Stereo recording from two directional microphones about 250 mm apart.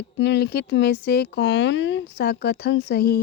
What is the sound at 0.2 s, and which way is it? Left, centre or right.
Speech, left.